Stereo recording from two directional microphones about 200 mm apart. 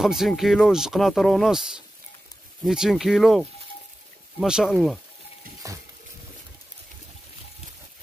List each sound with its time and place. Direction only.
0.0 s speech: centre (ahead or behind)
5.6 s speech: 15° right (ahead or behind)